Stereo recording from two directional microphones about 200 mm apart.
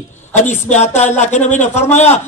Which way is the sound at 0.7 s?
35° left (ahead or behind).